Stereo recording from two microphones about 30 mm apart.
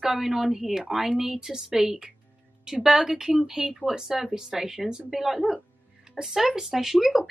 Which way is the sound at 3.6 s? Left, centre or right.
Right.